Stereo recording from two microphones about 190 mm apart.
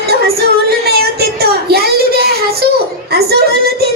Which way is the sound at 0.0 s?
55° right (ahead or behind).